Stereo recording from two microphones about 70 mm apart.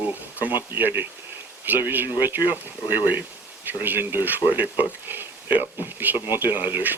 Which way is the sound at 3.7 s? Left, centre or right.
Right.